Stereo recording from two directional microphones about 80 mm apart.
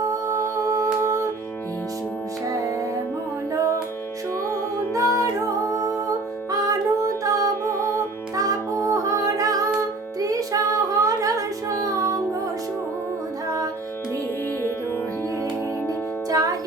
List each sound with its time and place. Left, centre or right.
0.0 s humming: right
4.9 s music: right
15.9 s music: right